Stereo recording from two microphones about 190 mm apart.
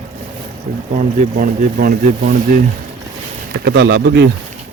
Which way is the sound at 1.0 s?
45° right (ahead or behind).